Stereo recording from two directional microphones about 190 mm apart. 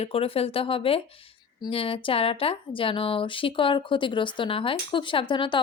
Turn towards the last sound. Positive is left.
turn(degrees=25)  # may be behind; listen again after turning